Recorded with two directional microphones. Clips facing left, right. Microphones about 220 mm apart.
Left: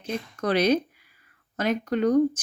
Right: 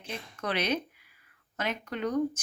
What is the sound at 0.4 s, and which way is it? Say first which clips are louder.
A woman's voice: left 9 dB; 40° left (ahead or behind).